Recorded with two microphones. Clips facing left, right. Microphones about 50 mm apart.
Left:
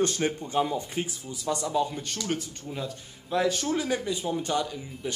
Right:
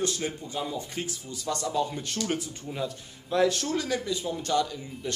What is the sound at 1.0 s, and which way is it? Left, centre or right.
Speech, centre.